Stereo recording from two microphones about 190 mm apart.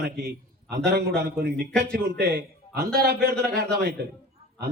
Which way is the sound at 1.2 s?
50° right (ahead or behind).